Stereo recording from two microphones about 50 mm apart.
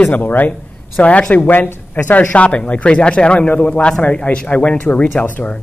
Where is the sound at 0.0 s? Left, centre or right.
Left.